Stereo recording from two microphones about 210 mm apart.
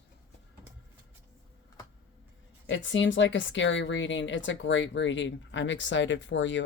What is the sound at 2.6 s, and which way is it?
Speech, 60° left (ahead or behind).